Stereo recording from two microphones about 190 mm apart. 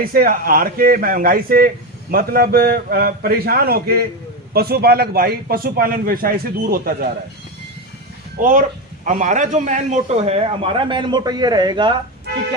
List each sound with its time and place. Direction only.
0.0 s speech: 50° right (ahead or behind)
8.4 s a man's voice: 45° right (ahead or behind); by 11.9 s 25° right (ahead or behind)